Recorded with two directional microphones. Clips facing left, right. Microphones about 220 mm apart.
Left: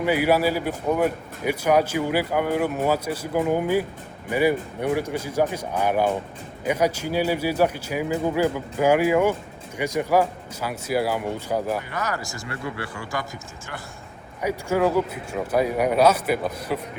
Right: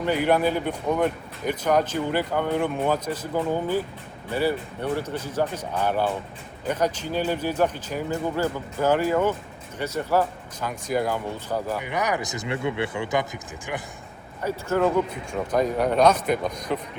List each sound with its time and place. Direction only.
0.0 s speech: 10° left (ahead or behind)
11.8 s speech: 15° right (ahead or behind)
14.4 s speech: 10° left (ahead or behind)